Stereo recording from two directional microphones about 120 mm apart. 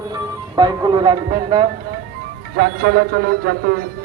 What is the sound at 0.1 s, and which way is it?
Speech, 35° right (ahead or behind).